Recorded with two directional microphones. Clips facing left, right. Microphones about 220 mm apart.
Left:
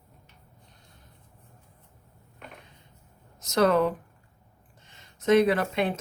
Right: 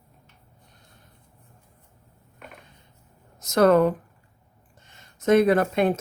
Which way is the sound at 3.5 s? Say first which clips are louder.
Right 5 dB; 50° right (ahead or behind).